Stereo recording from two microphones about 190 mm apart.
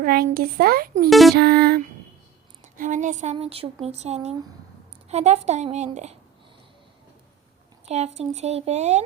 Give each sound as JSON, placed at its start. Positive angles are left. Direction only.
{"t": 0.0, "sound": "a child's voice", "side_deg": -50}
{"t": 1.1, "sound": "music", "side_deg": 0}
{"t": 1.4, "sound": "music", "side_deg": -60}
{"t": 2.7, "sound": "speech", "side_deg": -40}
{"t": 7.9, "sound": "speech", "side_deg": -35}